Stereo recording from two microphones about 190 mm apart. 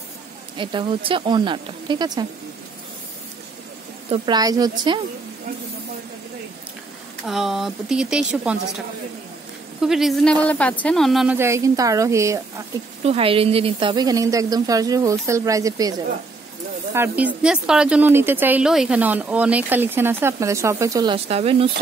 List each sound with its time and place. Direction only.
0.6 s a woman's voice: 25° right (ahead or behind)
4.1 s a woman's voice: 20° right (ahead or behind)
7.2 s speech: centre (ahead or behind)
9.8 s speech: centre (ahead or behind)
11.3 s a woman's voice: 15° right (ahead or behind)
13.0 s a woman's voice: 30° right (ahead or behind)
16.9 s a woman's voice: 10° right (ahead or behind)
21.3 s speech: 30° right (ahead or behind)